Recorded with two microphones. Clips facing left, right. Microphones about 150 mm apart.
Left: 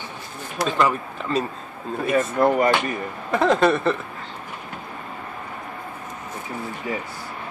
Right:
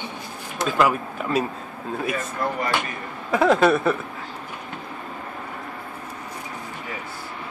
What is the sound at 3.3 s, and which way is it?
Speech, 5° right (ahead or behind).